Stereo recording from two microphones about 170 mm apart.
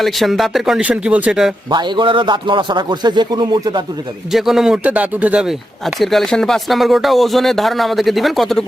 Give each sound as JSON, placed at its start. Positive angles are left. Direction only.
{"t": 0.0, "sound": "speech", "side_deg": 0}
{"t": 1.7, "sound": "speech", "side_deg": -30}
{"t": 4.3, "sound": "speech", "side_deg": 0}